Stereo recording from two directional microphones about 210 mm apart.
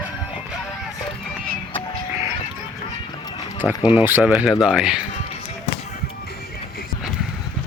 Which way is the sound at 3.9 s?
10° right (ahead or behind).